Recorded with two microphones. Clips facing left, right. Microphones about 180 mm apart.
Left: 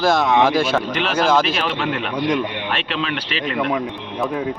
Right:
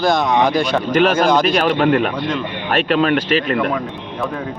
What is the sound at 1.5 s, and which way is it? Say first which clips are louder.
Speech: right 8 dB; 45° right (ahead or behind).